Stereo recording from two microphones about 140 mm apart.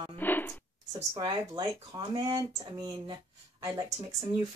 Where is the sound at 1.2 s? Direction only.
25° right (ahead or behind).